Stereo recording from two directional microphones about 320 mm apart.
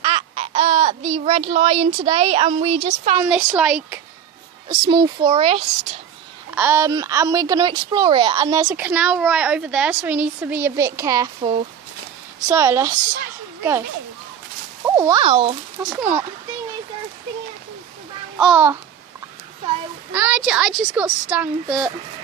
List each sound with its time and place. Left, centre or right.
0.0 s babbling: centre
3.2 s a woman's voice: centre
6.5 s a woman's voice: centre
14.8 s a woman's voice: centre
15.8 s a woman's voice: centre
18.3 s a woman's voice: centre
20.1 s a woman's voice: centre